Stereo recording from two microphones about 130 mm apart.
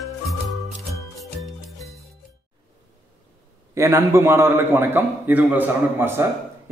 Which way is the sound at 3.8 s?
20° right (ahead or behind).